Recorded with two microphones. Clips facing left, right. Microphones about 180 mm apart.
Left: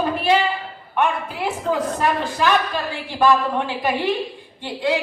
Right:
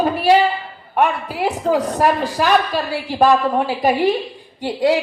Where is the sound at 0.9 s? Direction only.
35° right (ahead or behind).